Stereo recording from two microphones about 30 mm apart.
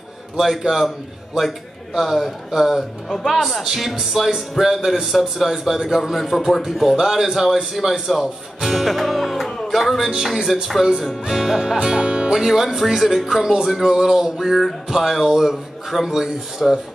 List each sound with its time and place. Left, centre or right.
0.4 s a man's voice: centre
8.6 s music: centre
9.7 s a man's voice: centre
11.8 s music: right
12.4 s a man's voice: centre